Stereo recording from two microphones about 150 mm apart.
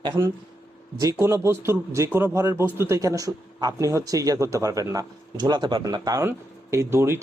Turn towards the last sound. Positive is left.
turn(degrees=-15)  # may be behind; listen again after turning